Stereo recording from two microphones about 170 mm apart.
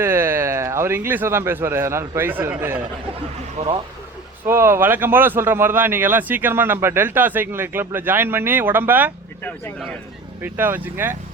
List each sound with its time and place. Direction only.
0.0 s speech: 15° right (ahead or behind)
3.6 s speech: 50° right (ahead or behind)
4.4 s speech: 15° right (ahead or behind)
10.4 s speech: 10° right (ahead or behind)